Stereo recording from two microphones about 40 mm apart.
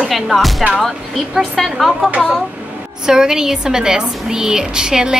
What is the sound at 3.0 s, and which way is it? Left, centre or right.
A woman's voice, centre.